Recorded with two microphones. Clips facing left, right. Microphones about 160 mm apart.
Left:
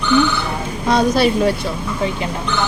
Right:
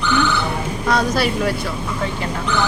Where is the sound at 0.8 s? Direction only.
25° left (ahead or behind).